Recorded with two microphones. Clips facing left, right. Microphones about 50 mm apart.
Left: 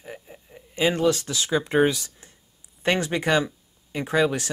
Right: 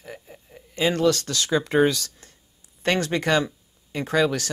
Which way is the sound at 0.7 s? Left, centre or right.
Left.